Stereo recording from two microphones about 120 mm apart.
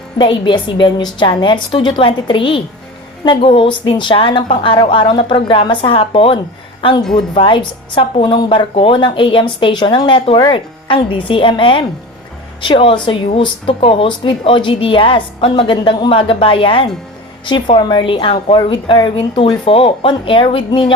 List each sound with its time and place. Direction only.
0.2 s speech: 40° left (ahead or behind)